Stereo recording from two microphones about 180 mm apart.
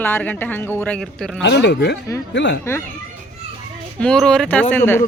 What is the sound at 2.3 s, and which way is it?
Speech, 80° left.